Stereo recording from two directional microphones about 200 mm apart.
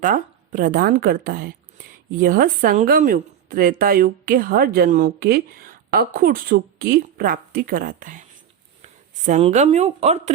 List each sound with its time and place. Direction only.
0.0 s a woman's voice: 40° right (ahead or behind)
9.2 s speech: 35° right (ahead or behind)